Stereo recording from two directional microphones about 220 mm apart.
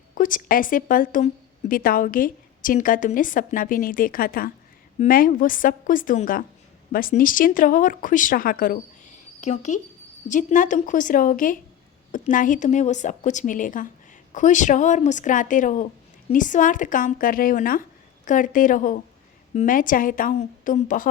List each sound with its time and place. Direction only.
0.1 s a woman's voice: 40° left (ahead or behind)